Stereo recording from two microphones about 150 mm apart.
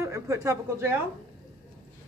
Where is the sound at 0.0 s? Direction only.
20° right (ahead or behind).